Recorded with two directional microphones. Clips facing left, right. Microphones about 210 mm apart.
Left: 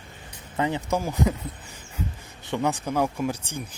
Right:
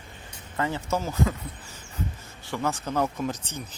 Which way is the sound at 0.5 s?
15° left (ahead or behind).